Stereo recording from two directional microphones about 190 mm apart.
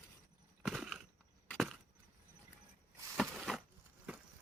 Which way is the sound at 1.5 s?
Centre (ahead or behind).